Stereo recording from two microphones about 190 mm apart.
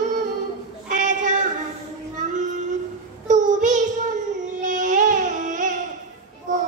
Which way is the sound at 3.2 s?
40° right (ahead or behind).